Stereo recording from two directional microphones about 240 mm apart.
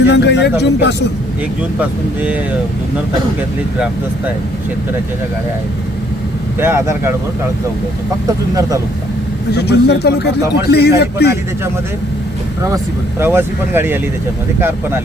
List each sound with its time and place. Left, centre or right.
0.1 s a man's voice: left
6.6 s speech: centre
9.5 s a man's voice: left
12.7 s speech: centre